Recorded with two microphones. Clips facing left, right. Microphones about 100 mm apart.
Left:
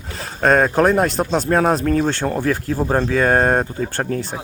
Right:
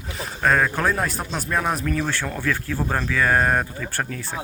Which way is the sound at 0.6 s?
25° left (ahead or behind).